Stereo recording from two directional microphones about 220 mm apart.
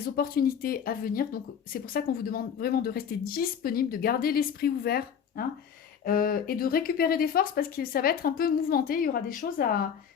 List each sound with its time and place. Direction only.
0.0 s speech: 40° left (ahead or behind)